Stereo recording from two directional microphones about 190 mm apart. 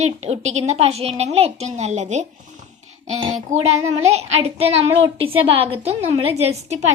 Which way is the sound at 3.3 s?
35° right (ahead or behind).